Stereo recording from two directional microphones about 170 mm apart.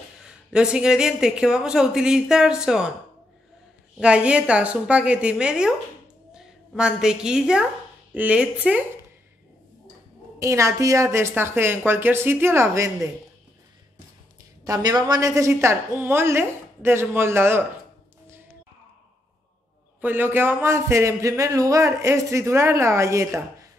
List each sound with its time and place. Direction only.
0.2 s speech: 5° right (ahead or behind)
4.0 s a woman's voice: 5° right (ahead or behind)
10.4 s speech: 15° right (ahead or behind)
14.6 s speech: 20° right (ahead or behind)
20.0 s speech: 10° right (ahead or behind)